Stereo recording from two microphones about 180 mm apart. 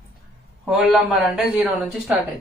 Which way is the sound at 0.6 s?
Centre (ahead or behind).